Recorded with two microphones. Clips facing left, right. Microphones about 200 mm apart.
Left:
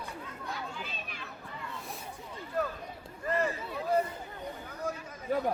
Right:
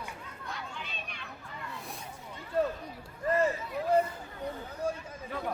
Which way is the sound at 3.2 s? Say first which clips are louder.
Right 3 dB; 30° right (ahead or behind).